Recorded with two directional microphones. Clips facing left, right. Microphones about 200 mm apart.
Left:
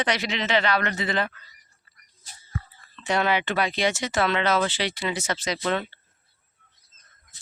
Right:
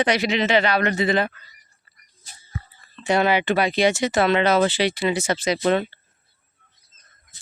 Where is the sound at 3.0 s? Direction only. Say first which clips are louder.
Right 4 dB; 10° right (ahead or behind).